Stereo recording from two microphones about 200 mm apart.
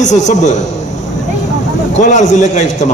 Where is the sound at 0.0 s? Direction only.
35° left (ahead or behind).